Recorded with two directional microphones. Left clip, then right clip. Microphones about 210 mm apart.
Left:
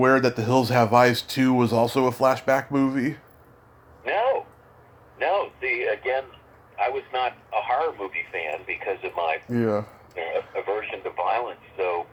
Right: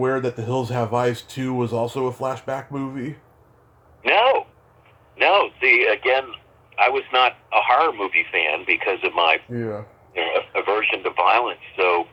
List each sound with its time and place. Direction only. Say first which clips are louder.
0.0 s speech: left 3 dB; 15° left (ahead or behind)
4.0 s telephone: right 6 dB; 25° right (ahead or behind)
5.1 s radio: right 7 dB; 25° right (ahead or behind)
6.7 s speech: right 8 dB; 25° right (ahead or behind)
9.5 s speech: left 4 dB; 20° left (ahead or behind)
10.2 s speech: right 6 dB; 25° right (ahead or behind)